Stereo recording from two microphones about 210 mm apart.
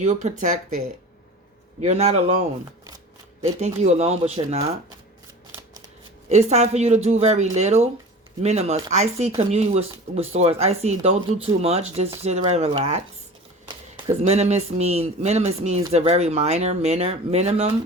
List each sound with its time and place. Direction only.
0.0 s speech: 35° right (ahead or behind)
1.8 s speech: 30° right (ahead or behind)
3.4 s speech: 30° right (ahead or behind)
6.2 s speech: 30° right (ahead or behind)
14.1 s speech: 30° right (ahead or behind)